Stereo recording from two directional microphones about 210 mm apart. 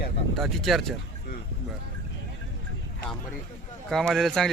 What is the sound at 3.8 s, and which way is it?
Speech, centre (ahead or behind).